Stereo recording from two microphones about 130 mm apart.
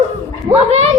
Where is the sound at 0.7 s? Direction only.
55° right (ahead or behind).